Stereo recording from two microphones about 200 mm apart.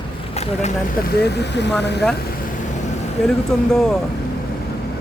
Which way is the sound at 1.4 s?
60° left (ahead or behind).